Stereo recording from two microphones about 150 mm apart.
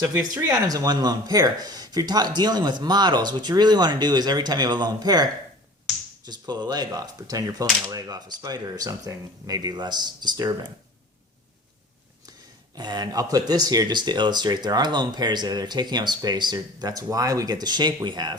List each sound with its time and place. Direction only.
0.0 s speech: 20° right (ahead or behind)
12.7 s speech: 25° right (ahead or behind)